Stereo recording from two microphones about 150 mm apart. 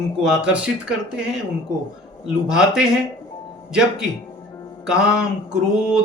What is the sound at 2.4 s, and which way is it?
Speech, 5° right (ahead or behind).